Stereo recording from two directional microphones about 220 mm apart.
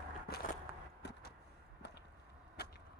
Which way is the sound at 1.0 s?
50° left (ahead or behind).